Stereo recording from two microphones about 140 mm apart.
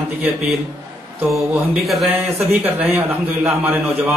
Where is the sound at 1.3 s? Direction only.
5° right (ahead or behind).